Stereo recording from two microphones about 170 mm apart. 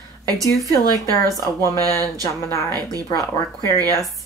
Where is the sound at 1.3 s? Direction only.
20° left (ahead or behind).